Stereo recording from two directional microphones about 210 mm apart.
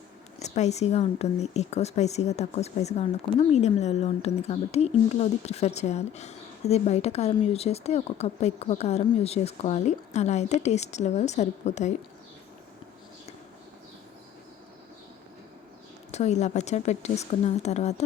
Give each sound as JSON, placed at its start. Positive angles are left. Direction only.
{"t": 0.3, "sound": "speech", "side_deg": 30}
{"t": 16.1, "sound": "speech", "side_deg": 30}